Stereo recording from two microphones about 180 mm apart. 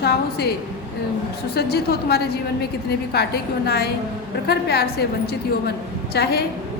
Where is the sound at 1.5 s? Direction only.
60° left (ahead or behind).